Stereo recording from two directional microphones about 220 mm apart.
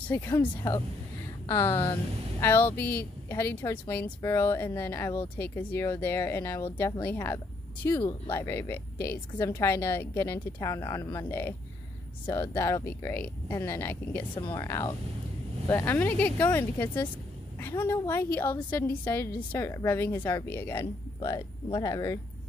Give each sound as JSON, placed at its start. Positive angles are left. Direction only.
{"t": 0.1, "sound": "a woman's voice", "side_deg": 10}
{"t": 1.7, "sound": "speech", "side_deg": 20}
{"t": 2.4, "sound": "a woman's voice", "side_deg": 10}
{"t": 8.0, "sound": "speech", "side_deg": 20}
{"t": 8.4, "sound": "a woman's voice", "side_deg": 10}
{"t": 14.3, "sound": "a woman's voice", "side_deg": 20}